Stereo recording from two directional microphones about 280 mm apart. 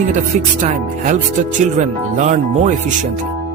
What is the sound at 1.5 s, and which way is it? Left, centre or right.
Music, right.